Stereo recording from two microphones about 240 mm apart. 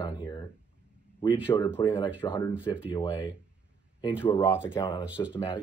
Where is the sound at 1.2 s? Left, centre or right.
Centre.